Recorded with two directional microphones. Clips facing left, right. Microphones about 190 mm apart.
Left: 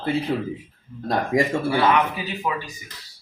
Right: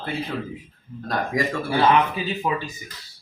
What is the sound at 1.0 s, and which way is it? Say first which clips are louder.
Speech: left 4 dB; 25° left (ahead or behind).